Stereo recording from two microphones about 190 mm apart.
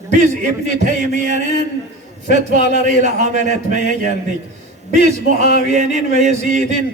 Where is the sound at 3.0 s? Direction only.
40° right (ahead or behind).